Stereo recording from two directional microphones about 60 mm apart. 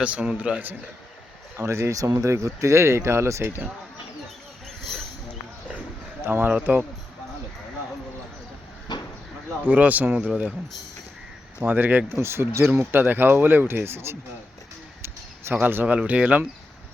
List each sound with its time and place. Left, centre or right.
0.0 s a man's voice: right
1.6 s speech: right
2.3 s speech: right
3.4 s speech: right
4.8 s a sound: centre
6.2 s speech: right
6.5 s speech: right
9.6 s a man's voice: right
11.6 s a man's voice: right
12.2 s speech: right
15.6 s a man's voice: right